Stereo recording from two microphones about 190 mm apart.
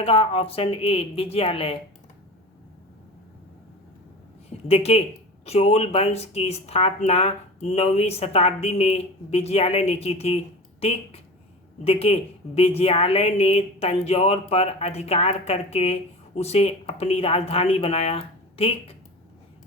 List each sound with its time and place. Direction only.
0.0 s a woman's voice: 30° left (ahead or behind)
4.4 s a woman's voice: 30° left (ahead or behind)